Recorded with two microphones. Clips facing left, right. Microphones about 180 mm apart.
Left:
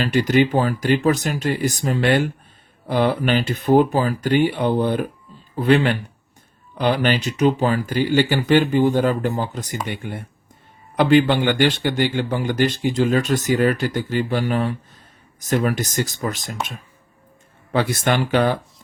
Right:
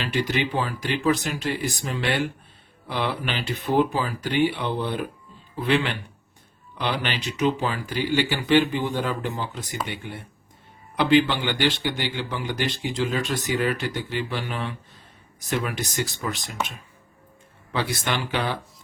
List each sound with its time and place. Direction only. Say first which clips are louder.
0.0 s speech: left 8 dB; 45° left (ahead or behind)
17.7 s speech: left 7 dB; 50° left (ahead or behind)